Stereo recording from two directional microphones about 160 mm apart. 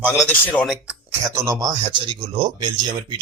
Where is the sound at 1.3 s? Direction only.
20° right (ahead or behind).